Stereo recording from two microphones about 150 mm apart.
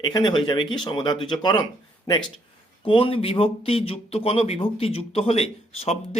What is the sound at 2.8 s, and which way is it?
Speech, 35° left (ahead or behind).